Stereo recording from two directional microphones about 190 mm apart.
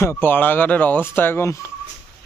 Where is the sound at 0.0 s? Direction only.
10° left (ahead or behind).